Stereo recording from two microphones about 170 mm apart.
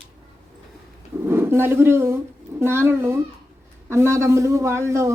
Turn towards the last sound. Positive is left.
turn(degrees=-15)  # may be behind; listen again after turning